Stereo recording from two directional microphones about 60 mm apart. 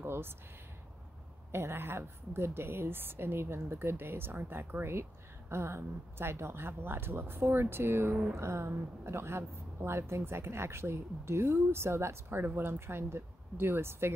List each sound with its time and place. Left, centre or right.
0.0 s speech: right
1.5 s a woman's voice: right